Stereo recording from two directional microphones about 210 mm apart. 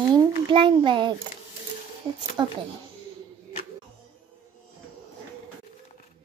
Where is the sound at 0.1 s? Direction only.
20° right (ahead or behind).